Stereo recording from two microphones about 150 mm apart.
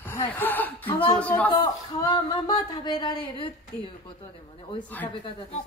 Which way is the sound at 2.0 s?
25° left (ahead or behind).